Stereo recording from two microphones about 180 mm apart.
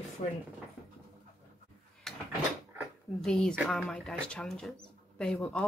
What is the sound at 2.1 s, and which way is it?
Drawer open or close, centre (ahead or behind).